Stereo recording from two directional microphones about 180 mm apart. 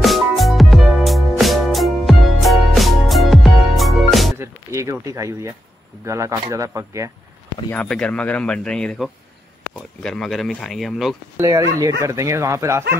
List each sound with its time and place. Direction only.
0.0 s music: centre (ahead or behind)
4.4 s speech: 15° right (ahead or behind)
7.7 s speech: 5° left (ahead or behind)
11.3 s speech: 20° right (ahead or behind)